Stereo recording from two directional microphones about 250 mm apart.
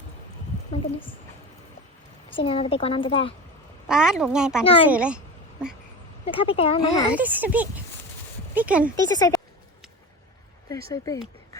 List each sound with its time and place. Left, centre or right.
2.3 s a woman's voice: left
3.8 s a woman's voice: centre
4.6 s a woman's voice: left
4.9 s a woman's voice: centre
6.2 s a woman's voice: left
7.1 s a woman's voice: centre
9.0 s speech: centre
10.9 s speech: centre